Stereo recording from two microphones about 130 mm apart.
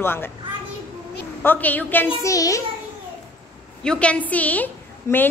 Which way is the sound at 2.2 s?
25° left (ahead or behind).